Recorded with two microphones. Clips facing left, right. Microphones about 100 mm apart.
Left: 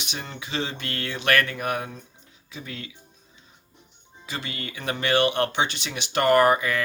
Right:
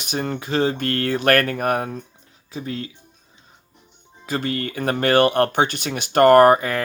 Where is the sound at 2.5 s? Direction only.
35° right (ahead or behind).